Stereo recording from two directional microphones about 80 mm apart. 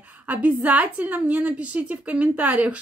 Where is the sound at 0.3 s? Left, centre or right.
Centre.